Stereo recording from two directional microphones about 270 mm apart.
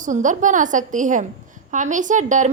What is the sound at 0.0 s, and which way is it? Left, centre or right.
A woman's voice, right.